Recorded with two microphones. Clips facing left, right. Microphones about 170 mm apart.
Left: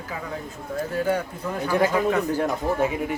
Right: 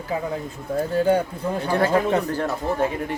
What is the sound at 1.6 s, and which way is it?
Speech, 10° left (ahead or behind).